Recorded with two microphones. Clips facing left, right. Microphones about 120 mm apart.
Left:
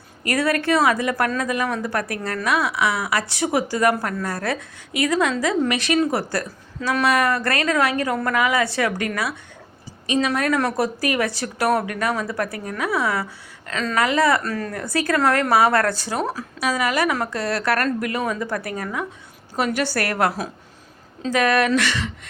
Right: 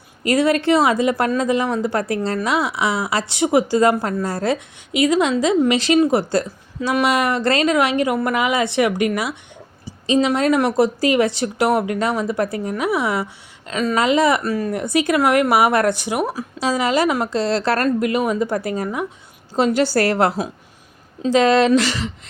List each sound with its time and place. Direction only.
0.2 s speech: 20° right (ahead or behind)
16.6 s speech: 25° right (ahead or behind)